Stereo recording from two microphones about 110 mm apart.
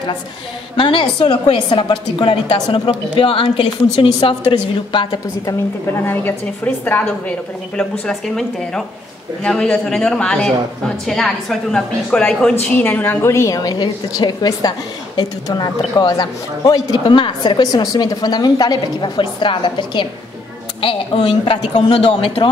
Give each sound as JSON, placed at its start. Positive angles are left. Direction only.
{"t": 0.7, "sound": "a woman's voice", "side_deg": 50}
{"t": 6.0, "sound": "a woman's voice", "side_deg": 15}
{"t": 17.1, "sound": "a woman's voice", "side_deg": 45}